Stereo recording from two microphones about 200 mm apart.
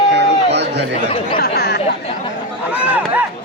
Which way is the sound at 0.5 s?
60° right (ahead or behind).